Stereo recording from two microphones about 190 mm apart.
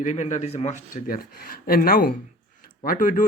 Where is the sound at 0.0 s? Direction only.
40° left (ahead or behind).